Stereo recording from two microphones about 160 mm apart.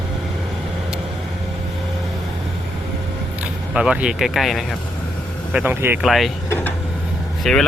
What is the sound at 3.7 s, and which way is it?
Speech, 5° right (ahead or behind).